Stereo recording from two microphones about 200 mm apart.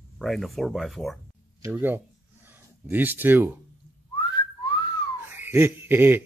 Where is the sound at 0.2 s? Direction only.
Centre (ahead or behind).